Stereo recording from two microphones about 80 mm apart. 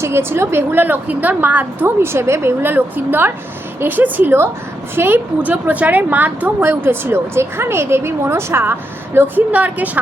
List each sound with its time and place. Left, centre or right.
0.0 s a woman's voice: right